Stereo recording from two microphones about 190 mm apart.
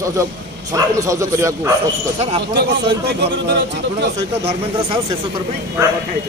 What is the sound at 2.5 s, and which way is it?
Speech, 60° right (ahead or behind).